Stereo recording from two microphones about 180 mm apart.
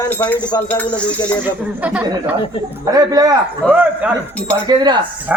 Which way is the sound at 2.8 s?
20° right (ahead or behind).